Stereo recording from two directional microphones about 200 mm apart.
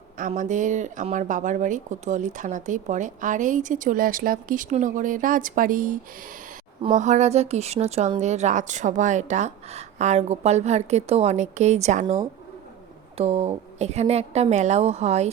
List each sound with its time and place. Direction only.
0.2 s speech: 40° right (ahead or behind)
6.9 s speech: 35° right (ahead or behind)
13.1 s speech: 30° right (ahead or behind)